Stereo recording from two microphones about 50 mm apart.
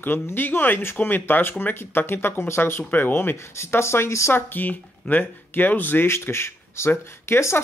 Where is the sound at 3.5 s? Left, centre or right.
Left.